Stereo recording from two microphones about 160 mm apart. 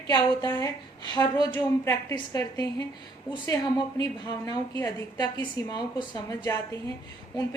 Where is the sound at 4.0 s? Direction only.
25° left (ahead or behind).